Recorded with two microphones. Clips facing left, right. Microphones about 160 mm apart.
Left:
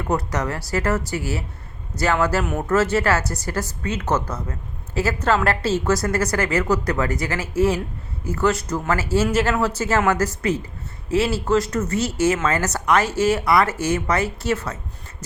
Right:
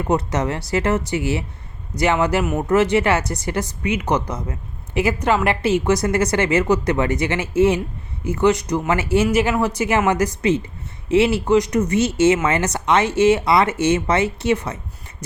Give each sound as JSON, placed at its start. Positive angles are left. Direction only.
{"t": 0.0, "sound": "a woman's voice", "side_deg": -20}